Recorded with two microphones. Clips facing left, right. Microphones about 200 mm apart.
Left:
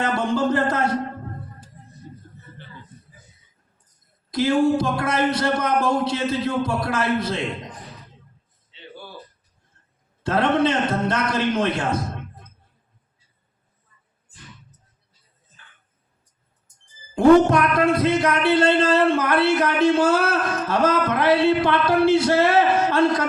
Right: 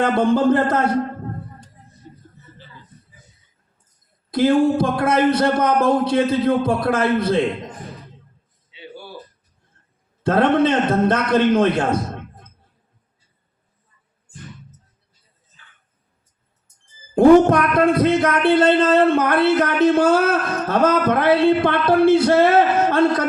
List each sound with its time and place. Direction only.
0.0 s music: 55° right (ahead or behind)
1.8 s vehicle: 50° left (ahead or behind)
4.3 s music: 50° right (ahead or behind)
8.7 s a sound: 10° right (ahead or behind)
10.2 s music: 55° right (ahead or behind)
17.2 s music: 55° right (ahead or behind)